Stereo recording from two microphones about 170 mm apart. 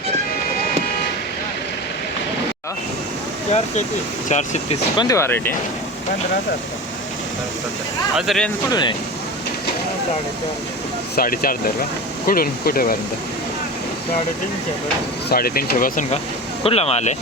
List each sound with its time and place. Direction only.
4.3 s speech: 45° left (ahead or behind)
4.9 s speech: 20° left (ahead or behind)
8.1 s speech: centre (ahead or behind)
8.7 s speech: 25° left (ahead or behind)
11.1 s speech: 60° left (ahead or behind)
15.3 s speech: 65° left (ahead or behind)
16.6 s speech: 35° left (ahead or behind)